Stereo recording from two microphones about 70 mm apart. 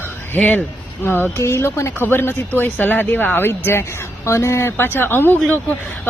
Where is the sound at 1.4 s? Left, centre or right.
Left.